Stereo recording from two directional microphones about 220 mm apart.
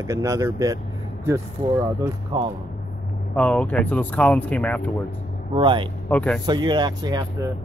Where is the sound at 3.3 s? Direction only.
5° left (ahead or behind).